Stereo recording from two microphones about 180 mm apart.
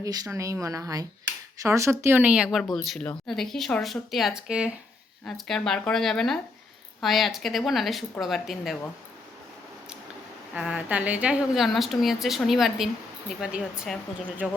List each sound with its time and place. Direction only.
0.0 s speech: 20° right (ahead or behind); by 8.9 s centre (ahead or behind)
10.5 s speech: 5° right (ahead or behind)